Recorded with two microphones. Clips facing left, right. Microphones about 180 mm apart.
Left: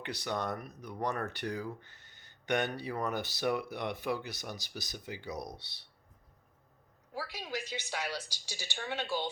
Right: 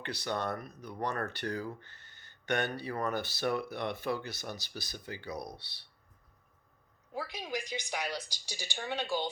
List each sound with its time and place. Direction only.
0.0 s speech: 15° left (ahead or behind)
7.1 s speech: 20° right (ahead or behind)